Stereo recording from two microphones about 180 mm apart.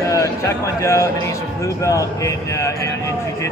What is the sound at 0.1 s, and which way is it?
Speech, 15° left (ahead or behind).